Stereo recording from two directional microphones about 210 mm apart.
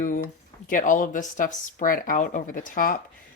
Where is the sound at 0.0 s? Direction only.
40° left (ahead or behind).